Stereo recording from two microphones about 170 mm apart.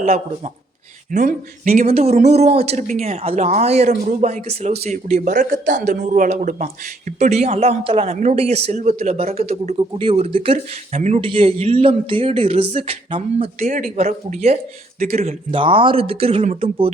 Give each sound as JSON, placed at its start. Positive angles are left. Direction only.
{"t": 1.1, "sound": "speech", "side_deg": -50}
{"t": 1.9, "sound": "a man's voice", "side_deg": -40}